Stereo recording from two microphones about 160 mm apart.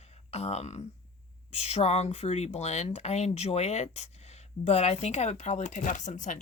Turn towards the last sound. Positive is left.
turn(degrees=50)  # may be behind; listen again after turning